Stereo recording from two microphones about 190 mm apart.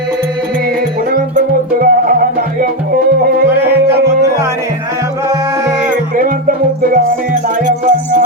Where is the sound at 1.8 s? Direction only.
50° right (ahead or behind).